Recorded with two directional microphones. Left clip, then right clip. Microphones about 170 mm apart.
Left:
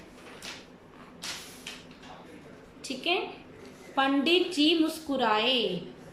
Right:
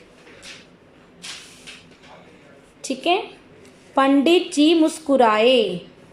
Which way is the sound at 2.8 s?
35° right (ahead or behind).